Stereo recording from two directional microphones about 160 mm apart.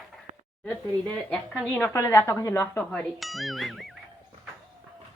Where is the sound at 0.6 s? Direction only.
10° left (ahead or behind).